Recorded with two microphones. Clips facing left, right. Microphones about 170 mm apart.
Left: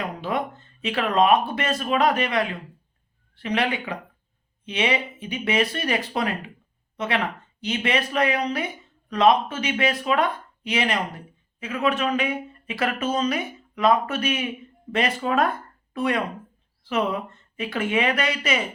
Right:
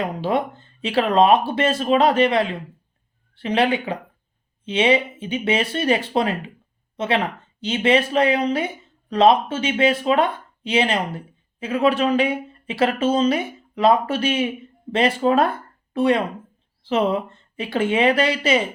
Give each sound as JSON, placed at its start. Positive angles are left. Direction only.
{"t": 0.0, "sound": "speech", "side_deg": -30}